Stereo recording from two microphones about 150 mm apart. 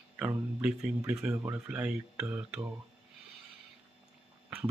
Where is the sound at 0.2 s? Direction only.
10° right (ahead or behind).